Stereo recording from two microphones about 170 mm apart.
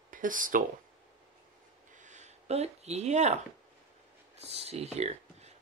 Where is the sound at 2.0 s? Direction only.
45° right (ahead or behind).